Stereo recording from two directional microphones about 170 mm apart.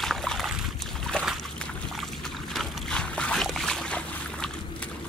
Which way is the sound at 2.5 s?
5° left (ahead or behind).